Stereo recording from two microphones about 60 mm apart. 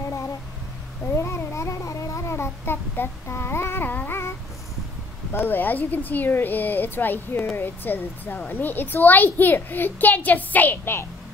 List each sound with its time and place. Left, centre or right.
1.1 s cat: left
2.3 s babbling: left
5.3 s a child's voice: left